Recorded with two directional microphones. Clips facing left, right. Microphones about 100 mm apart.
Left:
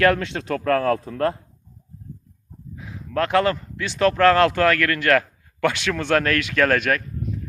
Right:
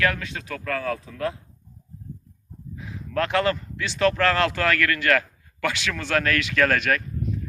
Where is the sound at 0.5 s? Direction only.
60° left (ahead or behind).